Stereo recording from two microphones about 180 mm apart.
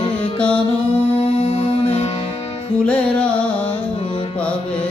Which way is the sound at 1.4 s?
35° left (ahead or behind).